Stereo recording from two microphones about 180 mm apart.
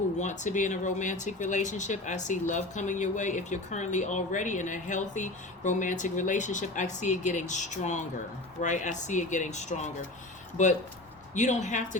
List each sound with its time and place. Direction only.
0.2 s speech: 40° left (ahead or behind)